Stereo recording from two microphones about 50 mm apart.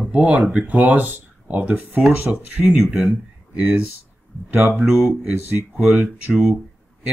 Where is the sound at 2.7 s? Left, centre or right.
Centre.